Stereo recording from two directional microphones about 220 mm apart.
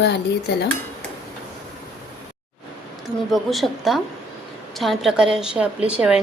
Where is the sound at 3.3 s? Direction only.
Centre (ahead or behind).